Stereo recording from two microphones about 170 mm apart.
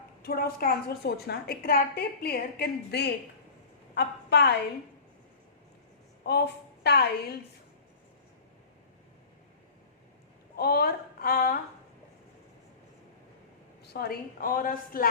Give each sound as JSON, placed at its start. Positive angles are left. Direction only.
{"t": 0.2, "sound": "a woman's voice", "side_deg": 65}
{"t": 6.8, "sound": "a woman's voice", "side_deg": 70}
{"t": 10.6, "sound": "a woman's voice", "side_deg": 65}
{"t": 13.8, "sound": "a woman's voice", "side_deg": 70}